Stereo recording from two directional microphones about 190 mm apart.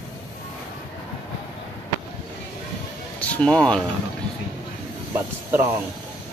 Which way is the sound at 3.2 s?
5° left (ahead or behind).